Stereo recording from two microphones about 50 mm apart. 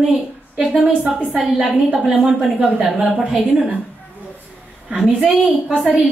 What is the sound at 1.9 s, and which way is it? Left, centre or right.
A woman's voice, right.